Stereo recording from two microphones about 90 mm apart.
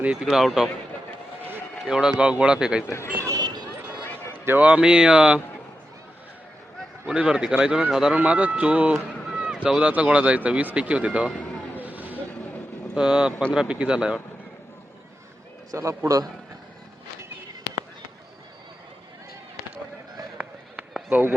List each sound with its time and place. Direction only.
0.0 s speech: 5° right (ahead or behind)
1.8 s speech: 5° right (ahead or behind)
2.8 s speech: 30° left (ahead or behind)
3.2 s a sound: 50° right (ahead or behind)
4.4 s speech: 20° right (ahead or behind)
7.1 s speech: 10° right (ahead or behind)
9.3 s run: 5° right (ahead or behind)
9.6 s speech: 10° right (ahead or behind)
11.8 s vehicle: 20° right (ahead or behind)
13.0 s speech: 10° right (ahead or behind)
15.7 s a man's voice: 35° right (ahead or behind)
21.1 s a sound: 20° right (ahead or behind)